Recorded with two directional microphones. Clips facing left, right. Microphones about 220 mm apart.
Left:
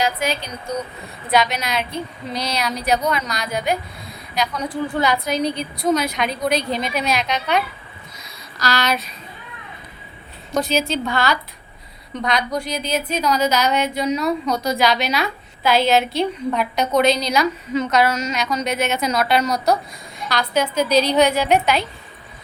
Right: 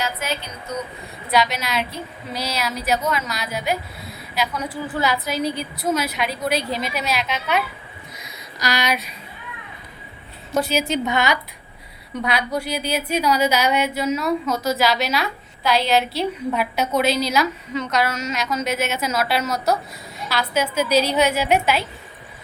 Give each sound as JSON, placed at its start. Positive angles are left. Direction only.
{"t": 1.3, "sound": "a woman's voice", "side_deg": 0}
{"t": 8.5, "sound": "a woman's voice", "side_deg": -15}
{"t": 10.5, "sound": "a woman's voice", "side_deg": -10}
{"t": 10.8, "sound": "a woman's voice", "side_deg": -20}
{"t": 12.2, "sound": "a woman's voice", "side_deg": -10}